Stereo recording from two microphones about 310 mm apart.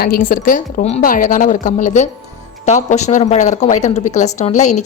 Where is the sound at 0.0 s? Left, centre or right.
Left.